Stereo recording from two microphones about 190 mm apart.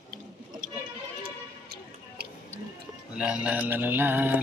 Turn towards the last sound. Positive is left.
turn(degrees=-10)  # may be behind; listen again after turning